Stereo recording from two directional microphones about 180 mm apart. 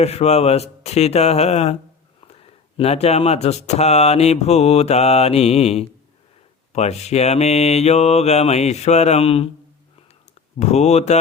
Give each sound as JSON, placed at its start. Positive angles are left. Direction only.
{"t": 0.0, "sound": "speech", "side_deg": 35}
{"t": 10.6, "sound": "speech", "side_deg": 40}